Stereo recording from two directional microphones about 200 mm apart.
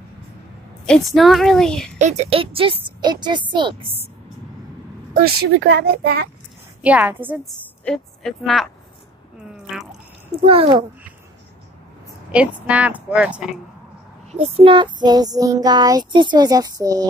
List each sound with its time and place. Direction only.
0.8 s a woman's voice: centre (ahead or behind)
2.0 s child singing: 35° right (ahead or behind)
5.1 s speech: 50° right (ahead or behind)
6.8 s a woman's voice: 5° right (ahead or behind)
7.8 s a woman's voice: 5° left (ahead or behind)
9.4 s drip: 5° right (ahead or behind)
10.4 s child singing: 25° right (ahead or behind)
12.3 s a woman's voice: 5° right (ahead or behind)
14.3 s child singing: 30° right (ahead or behind)